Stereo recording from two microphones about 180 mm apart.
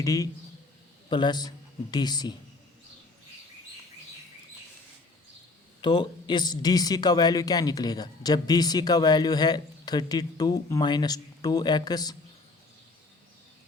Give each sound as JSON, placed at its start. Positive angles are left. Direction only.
{"t": 0.0, "sound": "a man's voice", "side_deg": 20}
{"t": 5.8, "sound": "a man's voice", "side_deg": 25}